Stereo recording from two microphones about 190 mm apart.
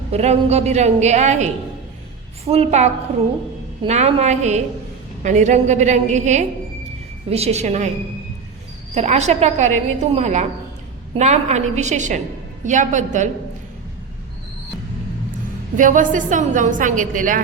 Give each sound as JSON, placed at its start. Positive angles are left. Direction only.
{"t": 0.1, "sound": "a woman's voice", "side_deg": -35}
{"t": 2.5, "sound": "a woman's voice", "side_deg": -35}
{"t": 9.0, "sound": "a woman's voice", "side_deg": -35}
{"t": 15.8, "sound": "a woman's voice", "side_deg": -45}